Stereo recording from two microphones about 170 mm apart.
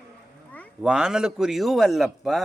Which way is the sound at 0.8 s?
5° right (ahead or behind).